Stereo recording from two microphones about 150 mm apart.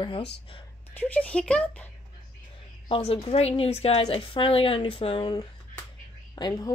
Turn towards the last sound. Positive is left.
turn(degrees=25)  # may be behind; listen again after turning